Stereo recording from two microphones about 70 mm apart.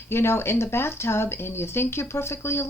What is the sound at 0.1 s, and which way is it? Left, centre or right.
Speech, left.